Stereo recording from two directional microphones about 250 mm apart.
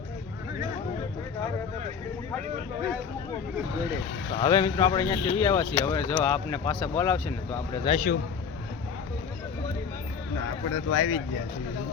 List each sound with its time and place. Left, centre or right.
4.4 s speech: centre
7.9 s a man's voice: left
10.8 s speech: left